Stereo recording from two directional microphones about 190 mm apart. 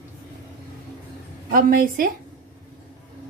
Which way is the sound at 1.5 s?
50° right (ahead or behind).